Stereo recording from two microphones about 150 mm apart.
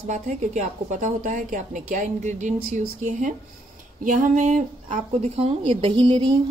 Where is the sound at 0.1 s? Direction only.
50° right (ahead or behind).